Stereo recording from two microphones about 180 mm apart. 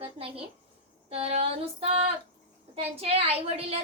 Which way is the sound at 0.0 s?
30° right (ahead or behind).